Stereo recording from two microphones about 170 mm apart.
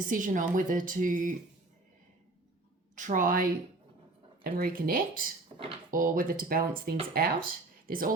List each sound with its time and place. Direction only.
0.0 s speech: 50° right (ahead or behind)
2.9 s a woman's voice: 45° right (ahead or behind)